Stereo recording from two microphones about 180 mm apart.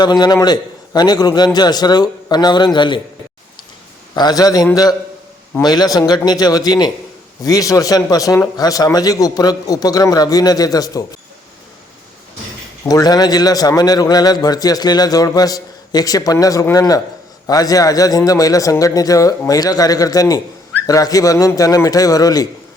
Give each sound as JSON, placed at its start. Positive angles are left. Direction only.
{"t": 0.0, "sound": "a man's voice", "side_deg": 25}
{"t": 4.1, "sound": "a man's voice", "side_deg": 20}
{"t": 12.8, "sound": "a man's voice", "side_deg": 20}